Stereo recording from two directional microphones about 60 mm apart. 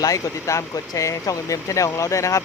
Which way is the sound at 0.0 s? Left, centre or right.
Left.